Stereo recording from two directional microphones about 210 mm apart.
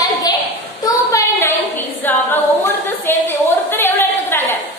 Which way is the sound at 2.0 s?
10° left (ahead or behind).